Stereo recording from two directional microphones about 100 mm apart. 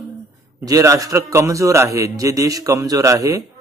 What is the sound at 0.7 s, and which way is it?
Speech, 35° right (ahead or behind).